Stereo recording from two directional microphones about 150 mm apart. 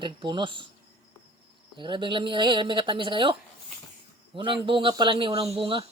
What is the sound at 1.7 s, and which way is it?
Speech, 30° right (ahead or behind).